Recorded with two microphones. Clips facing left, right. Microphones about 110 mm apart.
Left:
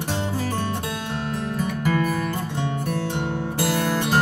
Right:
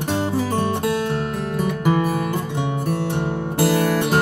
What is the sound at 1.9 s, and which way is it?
Music, 25° right (ahead or behind).